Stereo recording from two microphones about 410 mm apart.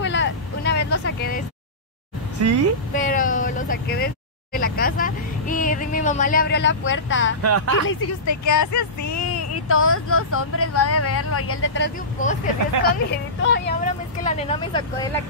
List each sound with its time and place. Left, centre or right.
0.0 s vehicle: left
2.4 s speech: right
2.9 s speech: centre
7.4 s speech: right
8.3 s speech: left; by 15.0 s centre